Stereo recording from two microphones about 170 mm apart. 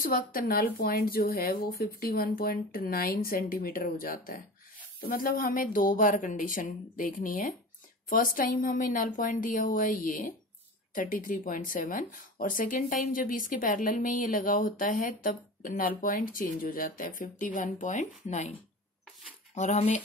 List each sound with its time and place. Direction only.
0.0 s speech: 55° left (ahead or behind)